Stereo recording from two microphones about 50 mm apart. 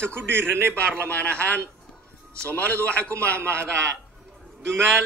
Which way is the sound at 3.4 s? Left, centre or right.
Right.